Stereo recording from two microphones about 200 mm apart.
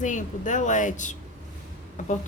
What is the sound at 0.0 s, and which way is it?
A woman's voice, 40° left (ahead or behind).